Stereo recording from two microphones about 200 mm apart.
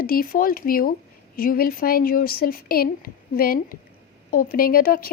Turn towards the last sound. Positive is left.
turn(degrees=45)  # may be behind; listen again after turning